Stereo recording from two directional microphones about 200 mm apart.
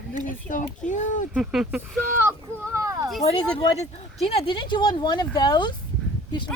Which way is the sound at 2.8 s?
15° right (ahead or behind).